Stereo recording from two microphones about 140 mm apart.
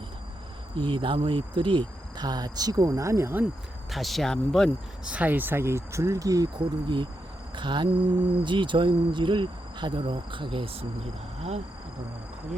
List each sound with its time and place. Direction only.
0.8 s speech: 35° right (ahead or behind); by 3.4 s 20° right (ahead or behind)
3.9 s speech: centre (ahead or behind)
5.0 s speech: 10° right (ahead or behind); by 7.1 s 35° right (ahead or behind)
7.5 s cricket: 35° right (ahead or behind)
8.4 s speech: 35° right (ahead or behind)